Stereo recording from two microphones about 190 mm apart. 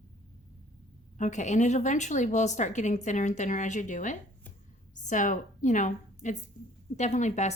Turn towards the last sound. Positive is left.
turn(degrees=40)  # may be behind; listen again after turning